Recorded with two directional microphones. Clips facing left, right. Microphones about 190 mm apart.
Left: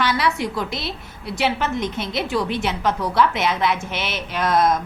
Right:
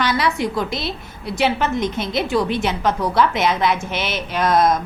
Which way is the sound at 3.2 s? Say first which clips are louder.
Right 1 dB; 40° right (ahead or behind).